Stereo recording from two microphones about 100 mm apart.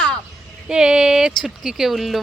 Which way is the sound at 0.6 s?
5° right (ahead or behind).